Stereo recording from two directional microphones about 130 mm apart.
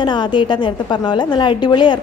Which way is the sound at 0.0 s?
35° left (ahead or behind).